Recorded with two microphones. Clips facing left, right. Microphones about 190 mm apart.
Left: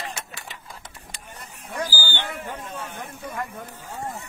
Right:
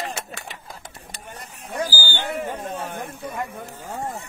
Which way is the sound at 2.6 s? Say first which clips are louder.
Right 5 dB; 55° right (ahead or behind).